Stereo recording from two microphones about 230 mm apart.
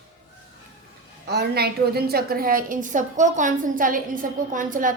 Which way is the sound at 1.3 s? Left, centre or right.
Right.